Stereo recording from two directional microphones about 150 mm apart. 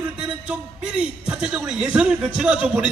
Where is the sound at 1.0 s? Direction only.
5° right (ahead or behind).